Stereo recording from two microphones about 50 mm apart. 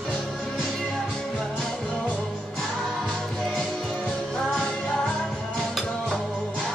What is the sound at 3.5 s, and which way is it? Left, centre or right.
Music, centre.